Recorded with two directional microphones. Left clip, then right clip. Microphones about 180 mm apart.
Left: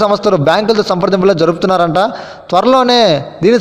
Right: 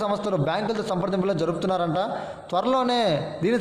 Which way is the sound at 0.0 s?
40° left (ahead or behind).